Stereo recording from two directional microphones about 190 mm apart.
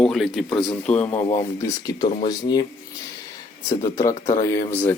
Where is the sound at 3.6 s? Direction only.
15° left (ahead or behind).